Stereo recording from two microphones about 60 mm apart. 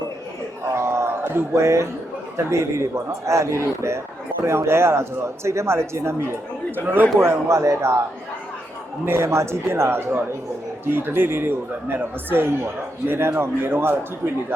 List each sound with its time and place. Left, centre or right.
0.6 s a sound: right
2.5 s a man's voice: right
6.7 s speech: right
7.2 s a man's voice: right
9.0 s a man's voice: right